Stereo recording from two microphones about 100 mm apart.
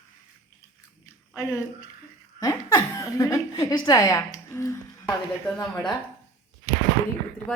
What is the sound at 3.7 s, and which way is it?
A woman's voice, 35° left (ahead or behind).